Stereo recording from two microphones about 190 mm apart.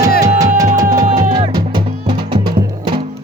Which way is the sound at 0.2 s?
15° right (ahead or behind).